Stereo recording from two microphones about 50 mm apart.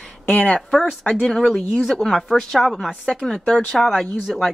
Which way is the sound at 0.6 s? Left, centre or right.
Centre.